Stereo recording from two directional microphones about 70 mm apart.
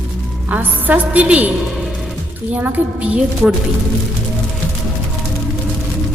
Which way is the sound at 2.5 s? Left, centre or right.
Right.